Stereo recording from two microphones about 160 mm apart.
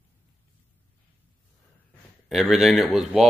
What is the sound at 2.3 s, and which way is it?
Speech, centre (ahead or behind).